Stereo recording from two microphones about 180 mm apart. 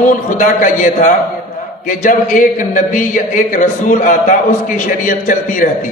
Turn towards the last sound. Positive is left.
turn(degrees=45)  # may be behind; listen again after turning